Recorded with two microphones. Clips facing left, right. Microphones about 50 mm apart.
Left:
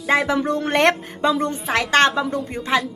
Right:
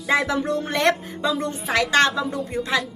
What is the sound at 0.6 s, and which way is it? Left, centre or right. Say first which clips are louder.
A woman's voice: left 3 dB; left.